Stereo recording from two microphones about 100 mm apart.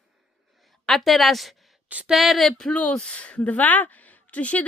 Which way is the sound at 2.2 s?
Centre (ahead or behind).